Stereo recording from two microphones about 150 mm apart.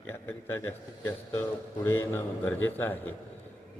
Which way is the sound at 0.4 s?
15° left (ahead or behind).